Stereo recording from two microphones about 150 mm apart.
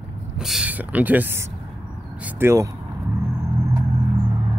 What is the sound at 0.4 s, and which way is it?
Speech, 5° right (ahead or behind).